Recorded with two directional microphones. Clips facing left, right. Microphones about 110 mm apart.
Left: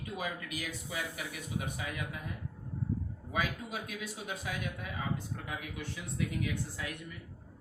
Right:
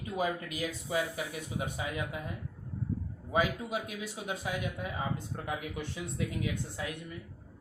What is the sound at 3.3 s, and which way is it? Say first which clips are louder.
Speech: right 5 dB; 25° right (ahead or behind).